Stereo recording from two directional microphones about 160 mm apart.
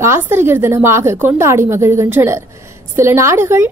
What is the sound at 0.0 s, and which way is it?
A woman's voice, 15° right (ahead or behind).